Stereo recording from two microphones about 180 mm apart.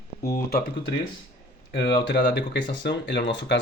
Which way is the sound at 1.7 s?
70° left (ahead or behind).